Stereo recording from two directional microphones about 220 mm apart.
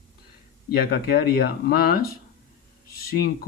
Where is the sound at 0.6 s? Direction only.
45° left (ahead or behind).